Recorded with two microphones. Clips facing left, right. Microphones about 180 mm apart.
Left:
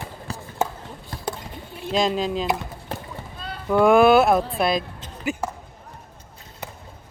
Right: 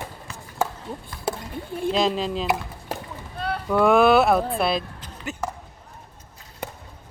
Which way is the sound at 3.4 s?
60° right (ahead or behind).